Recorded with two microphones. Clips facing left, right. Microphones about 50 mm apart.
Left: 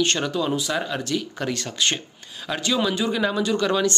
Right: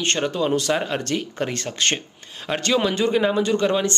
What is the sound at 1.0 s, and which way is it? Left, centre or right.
Speech, right.